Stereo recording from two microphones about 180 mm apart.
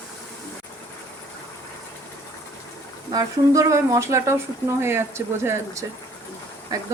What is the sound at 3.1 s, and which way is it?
Speech, 20° right (ahead or behind).